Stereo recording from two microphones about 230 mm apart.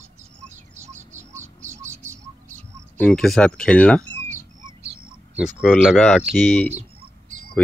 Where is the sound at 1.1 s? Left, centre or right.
Centre.